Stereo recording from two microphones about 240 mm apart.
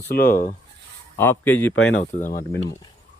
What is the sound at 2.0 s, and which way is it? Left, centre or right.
Speech, left.